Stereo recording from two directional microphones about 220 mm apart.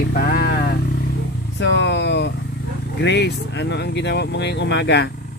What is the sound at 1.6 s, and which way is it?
Speech, 55° left (ahead or behind).